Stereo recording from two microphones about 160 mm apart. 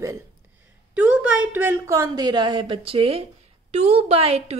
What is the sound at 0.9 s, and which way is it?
A woman's voice, 10° right (ahead or behind).